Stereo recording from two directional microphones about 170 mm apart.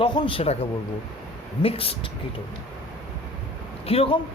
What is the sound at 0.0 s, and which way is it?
Speech, 30° left (ahead or behind).